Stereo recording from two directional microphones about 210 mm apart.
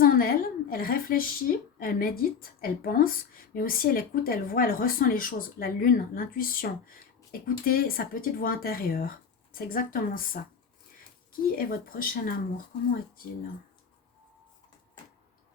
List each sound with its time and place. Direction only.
0.0 s a woman's voice: 45° left (ahead or behind)